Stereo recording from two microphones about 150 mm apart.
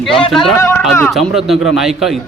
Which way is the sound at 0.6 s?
15° left (ahead or behind).